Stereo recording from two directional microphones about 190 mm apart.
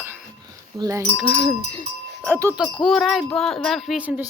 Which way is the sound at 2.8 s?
Centre (ahead or behind).